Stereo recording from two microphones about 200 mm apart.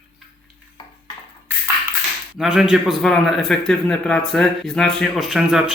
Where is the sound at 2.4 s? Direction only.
5° right (ahead or behind).